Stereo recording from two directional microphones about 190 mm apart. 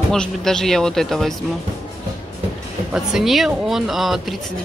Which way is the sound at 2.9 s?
Centre (ahead or behind).